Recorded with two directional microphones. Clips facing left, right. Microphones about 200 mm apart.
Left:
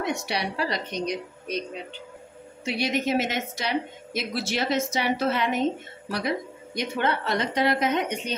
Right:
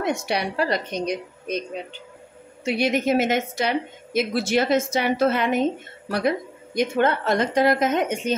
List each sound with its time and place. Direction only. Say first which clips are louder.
0.0 s a woman's voice: right 4 dB; 50° right (ahead or behind)
2.6 s a woman's voice: right 4 dB; 50° right (ahead or behind)